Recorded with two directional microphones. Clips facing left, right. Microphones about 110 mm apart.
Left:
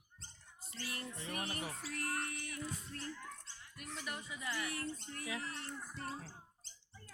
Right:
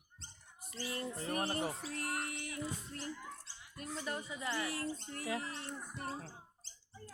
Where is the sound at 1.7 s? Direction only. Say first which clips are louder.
Right 5 dB; 15° right (ahead or behind).